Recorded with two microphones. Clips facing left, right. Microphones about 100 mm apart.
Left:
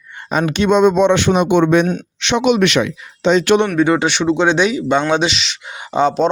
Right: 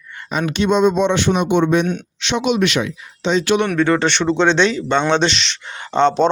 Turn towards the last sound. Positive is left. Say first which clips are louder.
# even
turn(degrees=5)  # may be behind; listen again after turning